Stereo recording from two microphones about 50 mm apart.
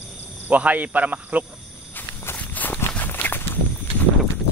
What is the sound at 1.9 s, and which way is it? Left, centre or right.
Walk, left.